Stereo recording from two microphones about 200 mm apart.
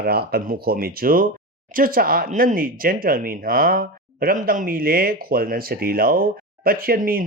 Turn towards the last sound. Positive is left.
turn(degrees=-45)  # may be behind; listen again after turning